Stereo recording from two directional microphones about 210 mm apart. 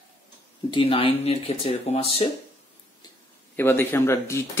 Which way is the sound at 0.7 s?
25° left (ahead or behind).